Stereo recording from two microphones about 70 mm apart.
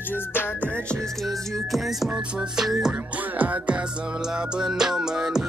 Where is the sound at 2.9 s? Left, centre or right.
Right.